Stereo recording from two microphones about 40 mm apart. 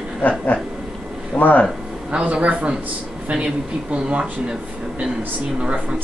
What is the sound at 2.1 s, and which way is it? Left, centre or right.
A man's voice, right.